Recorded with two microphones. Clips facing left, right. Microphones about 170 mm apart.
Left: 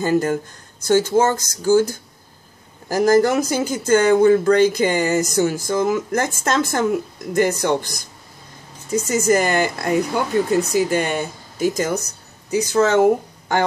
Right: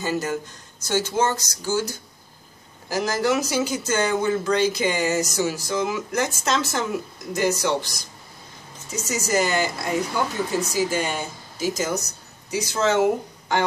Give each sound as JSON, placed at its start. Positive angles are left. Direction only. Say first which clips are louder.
{"t": 0.0, "sound": "speech", "louder": "left 7 dB", "side_deg": 50}